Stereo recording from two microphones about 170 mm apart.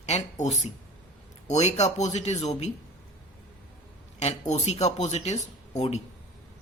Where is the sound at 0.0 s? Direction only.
40° left (ahead or behind).